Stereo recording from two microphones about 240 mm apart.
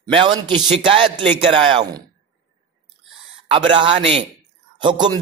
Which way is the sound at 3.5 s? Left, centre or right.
Right.